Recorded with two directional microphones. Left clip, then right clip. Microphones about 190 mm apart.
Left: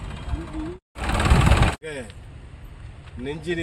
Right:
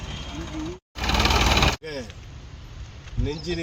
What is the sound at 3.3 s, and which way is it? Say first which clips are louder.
Speech: left 2 dB; 10° left (ahead or behind).